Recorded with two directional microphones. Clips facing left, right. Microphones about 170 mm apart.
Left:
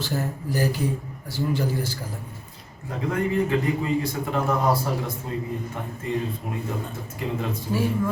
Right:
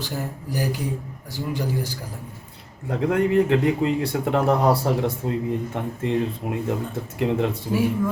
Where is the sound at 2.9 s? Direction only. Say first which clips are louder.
Right 5 dB; 70° right (ahead or behind).